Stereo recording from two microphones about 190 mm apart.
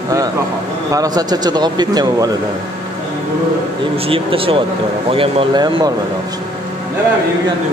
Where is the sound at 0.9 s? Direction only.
20° right (ahead or behind).